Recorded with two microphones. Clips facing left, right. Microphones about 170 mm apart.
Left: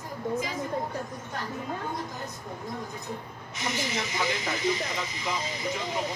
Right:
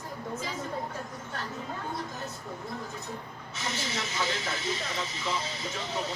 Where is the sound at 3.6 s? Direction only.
15° left (ahead or behind).